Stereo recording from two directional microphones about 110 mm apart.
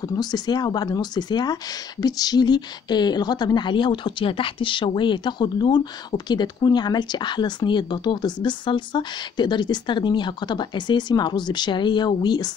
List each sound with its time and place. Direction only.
0.0 s speech: 35° left (ahead or behind)